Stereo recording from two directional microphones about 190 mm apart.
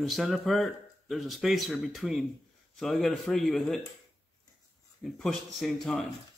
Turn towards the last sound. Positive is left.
turn(degrees=0)  # may be behind; listen again after turning